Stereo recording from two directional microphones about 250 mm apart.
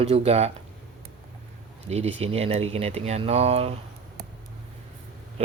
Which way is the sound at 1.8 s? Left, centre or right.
Right.